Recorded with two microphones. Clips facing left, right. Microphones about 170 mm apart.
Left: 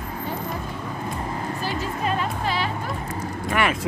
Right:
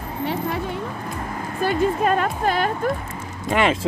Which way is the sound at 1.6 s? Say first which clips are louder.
Right 10 dB; 50° right (ahead or behind).